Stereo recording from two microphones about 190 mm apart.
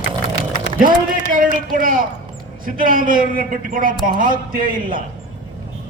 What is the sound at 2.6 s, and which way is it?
A man's voice, 45° right (ahead or behind).